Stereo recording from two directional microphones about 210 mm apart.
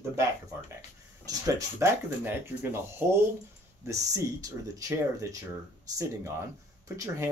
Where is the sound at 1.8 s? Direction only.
10° right (ahead or behind).